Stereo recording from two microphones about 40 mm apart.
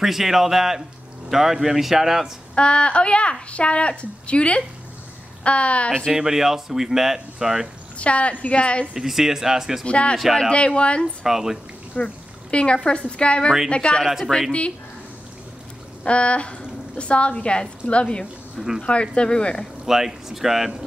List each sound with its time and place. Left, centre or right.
0.0 s speech: centre
2.5 s a woman's voice: left
6.1 s speech: centre
8.0 s a woman's voice: left
8.9 s speech: centre
9.8 s speech: left
11.2 s speech: centre
12.0 s speech: left
16.0 s a woman's voice: left
19.9 s speech: centre